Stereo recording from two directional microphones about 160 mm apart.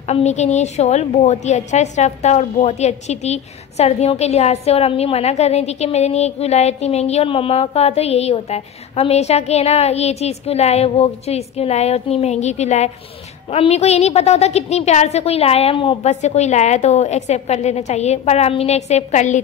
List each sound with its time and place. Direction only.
0.1 s a woman's voice: 45° left (ahead or behind)